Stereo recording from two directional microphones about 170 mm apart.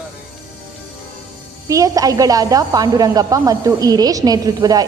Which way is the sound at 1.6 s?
20° right (ahead or behind).